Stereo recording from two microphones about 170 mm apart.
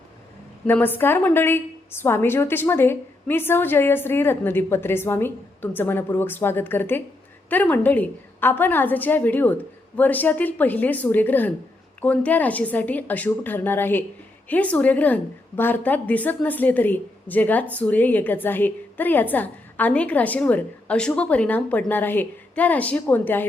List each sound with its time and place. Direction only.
0.7 s a woman's voice: 10° left (ahead or behind)